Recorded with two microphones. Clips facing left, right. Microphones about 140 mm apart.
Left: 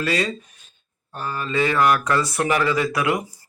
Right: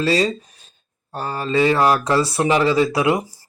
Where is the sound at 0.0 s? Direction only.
30° right (ahead or behind).